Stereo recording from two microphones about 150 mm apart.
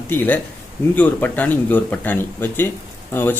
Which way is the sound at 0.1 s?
15° left (ahead or behind).